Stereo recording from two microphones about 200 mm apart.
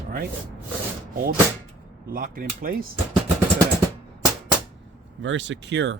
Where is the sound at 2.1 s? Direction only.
45° right (ahead or behind).